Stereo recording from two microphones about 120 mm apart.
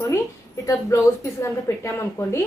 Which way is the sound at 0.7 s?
25° left (ahead or behind).